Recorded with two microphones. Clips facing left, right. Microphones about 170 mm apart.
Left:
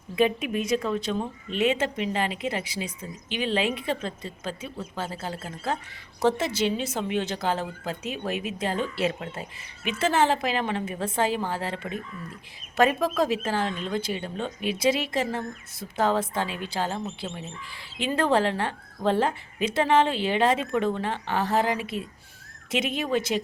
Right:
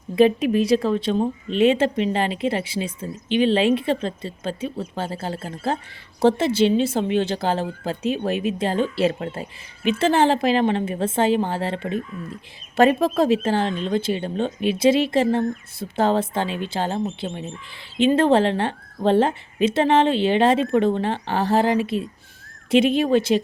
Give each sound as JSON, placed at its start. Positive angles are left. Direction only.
{"t": 0.2, "sound": "a woman's voice", "side_deg": -35}